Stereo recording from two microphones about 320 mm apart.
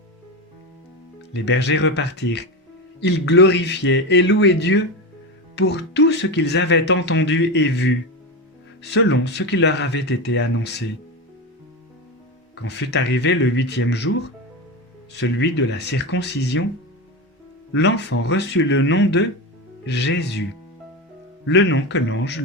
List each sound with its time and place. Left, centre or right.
1.3 s speech: left
12.5 s speech: left
15.1 s speech: left
17.7 s speech: left
21.4 s speech: left